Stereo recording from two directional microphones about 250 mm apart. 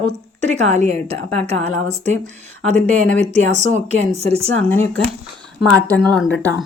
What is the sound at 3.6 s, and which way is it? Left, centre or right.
Speech, right.